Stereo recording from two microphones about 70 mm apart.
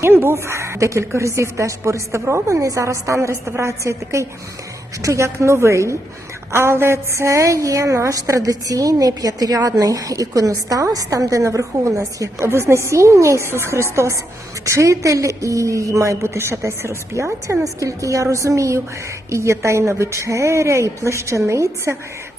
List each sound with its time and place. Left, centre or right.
0.0 s a woman's voice: right
12.5 s a woman's voice: right